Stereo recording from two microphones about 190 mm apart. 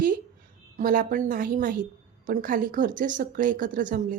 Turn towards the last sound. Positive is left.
turn(degrees=-45)  # may be behind; listen again after turning